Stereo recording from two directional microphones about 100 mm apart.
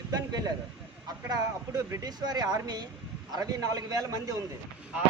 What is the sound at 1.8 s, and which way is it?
Speech, 30° right (ahead or behind).